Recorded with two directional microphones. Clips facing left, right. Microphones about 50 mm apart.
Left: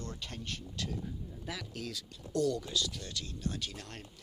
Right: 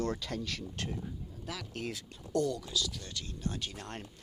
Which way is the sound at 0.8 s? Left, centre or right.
Right.